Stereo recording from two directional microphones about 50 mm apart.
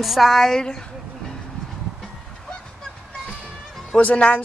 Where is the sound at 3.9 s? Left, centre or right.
Left.